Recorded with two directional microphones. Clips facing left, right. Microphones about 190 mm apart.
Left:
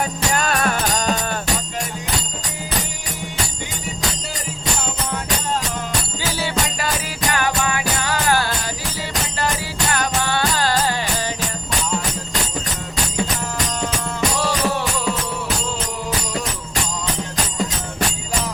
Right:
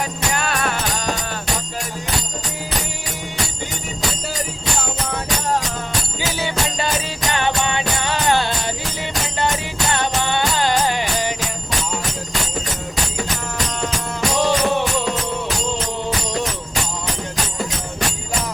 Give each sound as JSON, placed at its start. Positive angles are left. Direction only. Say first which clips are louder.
{"t": 0.3, "sound": "music", "louder": "left 3 dB", "side_deg": 45}
{"t": 6.3, "sound": "music", "louder": "even", "side_deg": -20}
{"t": 9.9, "sound": "music", "louder": "right 1 dB", "side_deg": -25}
{"t": 14.3, "sound": "music", "louder": "right 6 dB", "side_deg": -20}